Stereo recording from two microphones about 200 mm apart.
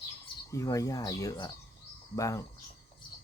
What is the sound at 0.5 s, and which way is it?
Speech, 15° left (ahead or behind).